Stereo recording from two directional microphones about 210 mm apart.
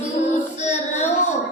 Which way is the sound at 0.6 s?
35° left (ahead or behind).